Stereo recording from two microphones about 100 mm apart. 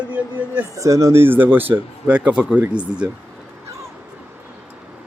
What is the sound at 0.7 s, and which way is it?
Speech, 30° right (ahead or behind).